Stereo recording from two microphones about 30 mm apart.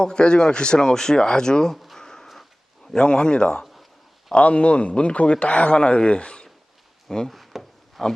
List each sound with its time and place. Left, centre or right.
0.0 s speech: left
0.8 s speech: centre
1.7 s speech: centre
2.0 s a sound: centre
2.2 s wheeze: centre
2.9 s speech: left
4.4 s a man's voice: left
5.7 s speech: left
7.3 s wood: centre